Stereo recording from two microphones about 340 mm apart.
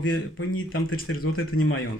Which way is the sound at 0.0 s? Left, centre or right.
Left.